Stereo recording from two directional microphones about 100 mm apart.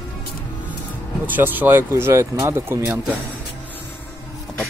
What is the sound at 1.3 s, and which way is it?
Speech, 20° right (ahead or behind).